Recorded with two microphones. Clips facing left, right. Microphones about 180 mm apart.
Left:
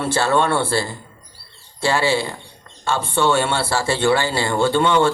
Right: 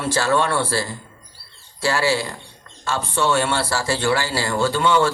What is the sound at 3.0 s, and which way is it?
Speech, 60° left (ahead or behind).